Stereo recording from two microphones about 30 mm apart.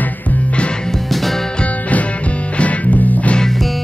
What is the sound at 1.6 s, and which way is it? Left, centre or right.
Music, left.